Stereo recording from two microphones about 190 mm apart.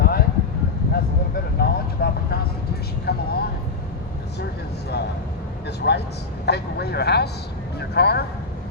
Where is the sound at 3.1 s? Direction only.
55° left (ahead or behind).